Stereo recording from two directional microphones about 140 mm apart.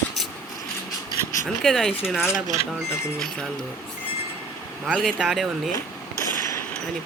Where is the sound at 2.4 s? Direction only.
55° right (ahead or behind).